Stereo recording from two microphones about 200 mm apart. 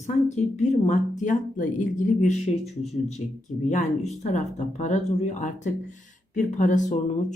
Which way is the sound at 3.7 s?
35° left (ahead or behind).